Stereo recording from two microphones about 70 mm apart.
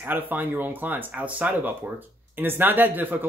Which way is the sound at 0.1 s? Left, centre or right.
Right.